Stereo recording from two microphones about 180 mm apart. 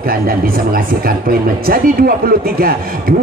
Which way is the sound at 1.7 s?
55° right (ahead or behind).